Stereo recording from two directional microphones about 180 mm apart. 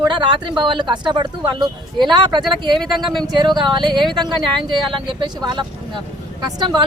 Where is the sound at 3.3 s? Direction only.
25° right (ahead or behind).